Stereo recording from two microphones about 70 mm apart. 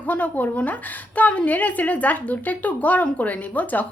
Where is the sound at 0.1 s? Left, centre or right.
Left.